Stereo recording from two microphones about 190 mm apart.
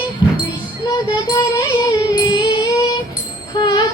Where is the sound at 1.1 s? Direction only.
20° left (ahead or behind).